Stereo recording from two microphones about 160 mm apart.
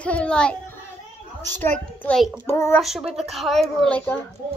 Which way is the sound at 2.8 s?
Centre (ahead or behind).